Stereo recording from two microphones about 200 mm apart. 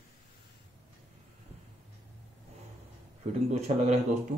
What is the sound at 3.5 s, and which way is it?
Speech, 35° right (ahead or behind).